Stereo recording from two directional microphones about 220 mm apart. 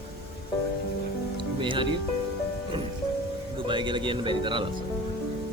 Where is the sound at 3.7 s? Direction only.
20° right (ahead or behind).